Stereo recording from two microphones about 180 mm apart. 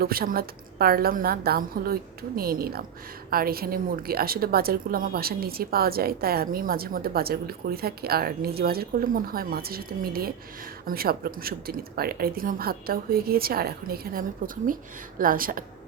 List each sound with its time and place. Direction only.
0.0 s a woman's voice: 55° right (ahead or behind)